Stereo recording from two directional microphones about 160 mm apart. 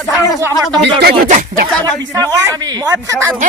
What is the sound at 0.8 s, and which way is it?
Speech, 85° right.